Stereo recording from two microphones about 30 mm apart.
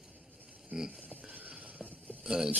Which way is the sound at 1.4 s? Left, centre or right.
Right.